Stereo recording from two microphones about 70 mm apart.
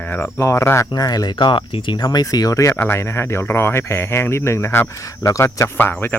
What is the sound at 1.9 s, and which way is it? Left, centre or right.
Speech, left.